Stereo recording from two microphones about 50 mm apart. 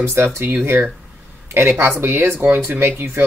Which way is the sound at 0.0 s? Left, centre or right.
Right.